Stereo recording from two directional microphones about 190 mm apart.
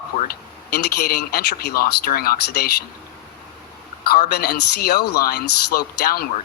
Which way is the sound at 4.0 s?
55° left (ahead or behind).